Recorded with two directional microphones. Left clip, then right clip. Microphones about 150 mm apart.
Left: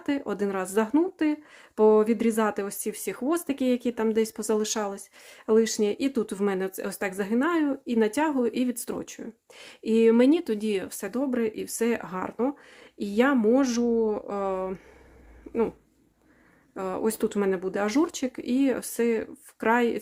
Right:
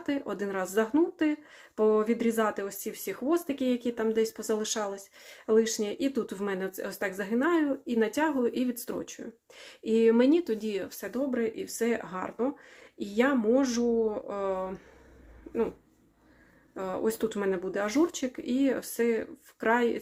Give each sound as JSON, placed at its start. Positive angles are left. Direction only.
{"t": 0.0, "sound": "speech", "side_deg": 40}
{"t": 16.7, "sound": "speech", "side_deg": 40}